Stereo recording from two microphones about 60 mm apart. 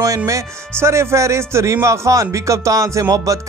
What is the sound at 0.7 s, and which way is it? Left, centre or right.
Speech, right.